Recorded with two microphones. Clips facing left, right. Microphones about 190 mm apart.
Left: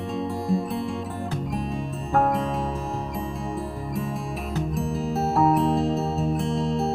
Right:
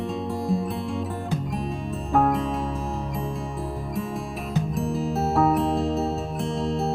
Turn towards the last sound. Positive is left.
turn(degrees=0)  # may be behind; listen again after turning